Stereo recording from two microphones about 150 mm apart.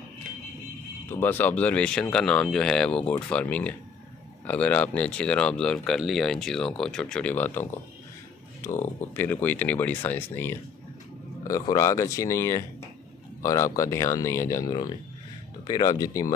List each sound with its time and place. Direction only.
1.0 s speech: 15° left (ahead or behind)
9.1 s speech: 15° left (ahead or behind)